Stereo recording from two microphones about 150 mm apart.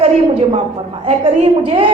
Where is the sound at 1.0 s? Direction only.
35° right (ahead or behind).